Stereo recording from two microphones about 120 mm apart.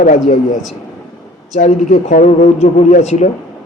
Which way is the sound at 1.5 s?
90° left.